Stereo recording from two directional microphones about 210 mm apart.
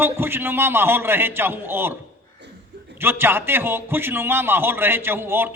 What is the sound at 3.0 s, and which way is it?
A man's voice, 10° right (ahead or behind).